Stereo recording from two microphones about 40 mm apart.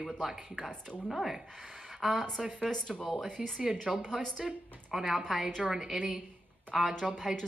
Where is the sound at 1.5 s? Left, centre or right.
Centre.